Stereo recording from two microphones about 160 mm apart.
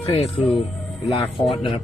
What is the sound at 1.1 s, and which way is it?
Speech, 35° left (ahead or behind).